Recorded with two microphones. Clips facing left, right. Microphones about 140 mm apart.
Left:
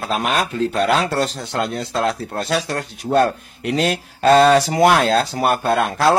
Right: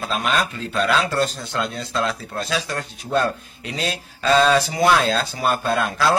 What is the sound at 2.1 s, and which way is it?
Speech, 45° left (ahead or behind).